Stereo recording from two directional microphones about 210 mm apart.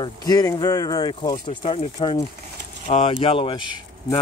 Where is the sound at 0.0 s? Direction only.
20° left (ahead or behind).